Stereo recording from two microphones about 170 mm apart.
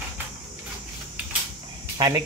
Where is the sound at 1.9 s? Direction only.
20° right (ahead or behind).